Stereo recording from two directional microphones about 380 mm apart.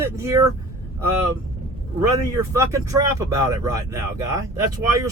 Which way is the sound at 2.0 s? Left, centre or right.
Centre.